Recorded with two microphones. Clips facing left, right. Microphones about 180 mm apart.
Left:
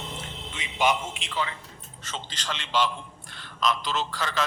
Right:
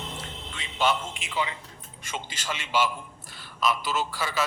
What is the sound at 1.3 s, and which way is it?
A woman's voice, 15° right (ahead or behind).